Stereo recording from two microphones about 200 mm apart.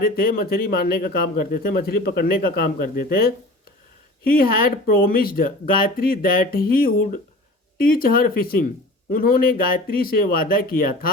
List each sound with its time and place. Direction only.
0.0 s speech: 45° left (ahead or behind)